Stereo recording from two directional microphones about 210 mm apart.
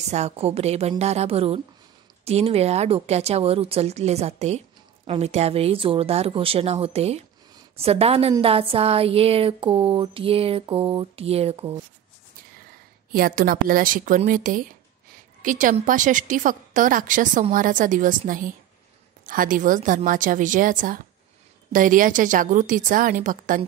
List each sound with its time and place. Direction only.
0.1 s a woman's voice: 30° right (ahead or behind)
13.1 s a woman's voice: 40° right (ahead or behind)